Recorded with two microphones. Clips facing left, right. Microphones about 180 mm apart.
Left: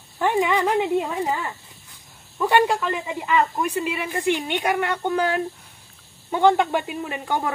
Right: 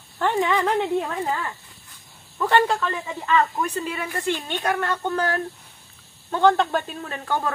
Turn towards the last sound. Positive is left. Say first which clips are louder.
# left 1 dB
turn(degrees=15)  # may be behind; listen again after turning